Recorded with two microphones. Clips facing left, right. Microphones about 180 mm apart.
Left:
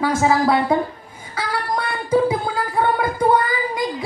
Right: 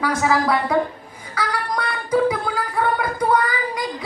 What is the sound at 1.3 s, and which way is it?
Singing, 25° left (ahead or behind).